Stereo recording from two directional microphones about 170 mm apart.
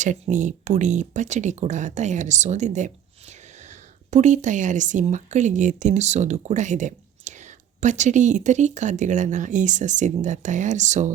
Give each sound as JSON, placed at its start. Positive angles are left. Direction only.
{"t": 0.0, "sound": "speech", "side_deg": -45}